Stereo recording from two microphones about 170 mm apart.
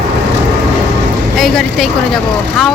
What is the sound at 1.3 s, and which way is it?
Speech, centre (ahead or behind).